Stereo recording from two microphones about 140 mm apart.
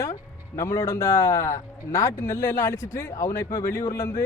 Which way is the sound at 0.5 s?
20° left (ahead or behind).